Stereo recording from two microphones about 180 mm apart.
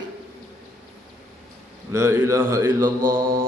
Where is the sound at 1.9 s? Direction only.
15° right (ahead or behind).